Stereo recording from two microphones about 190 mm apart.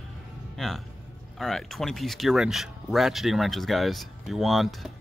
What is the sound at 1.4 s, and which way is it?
Speech, centre (ahead or behind).